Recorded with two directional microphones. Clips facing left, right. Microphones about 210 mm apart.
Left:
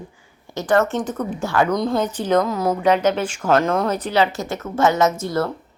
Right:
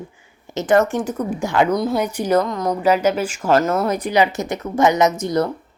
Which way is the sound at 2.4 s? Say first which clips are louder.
Left 1 dB; 5° left (ahead or behind).